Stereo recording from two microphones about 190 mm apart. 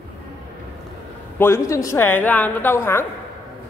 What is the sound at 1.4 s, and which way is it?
A woman's voice, 15° left (ahead or behind).